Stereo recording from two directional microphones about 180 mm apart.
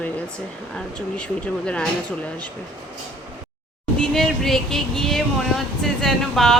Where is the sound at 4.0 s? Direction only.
Centre (ahead or behind).